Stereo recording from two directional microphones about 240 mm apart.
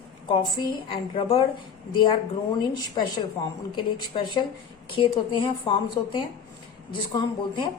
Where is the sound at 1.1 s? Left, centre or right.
Left.